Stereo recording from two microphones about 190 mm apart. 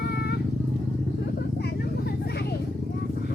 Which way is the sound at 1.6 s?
60° left (ahead or behind).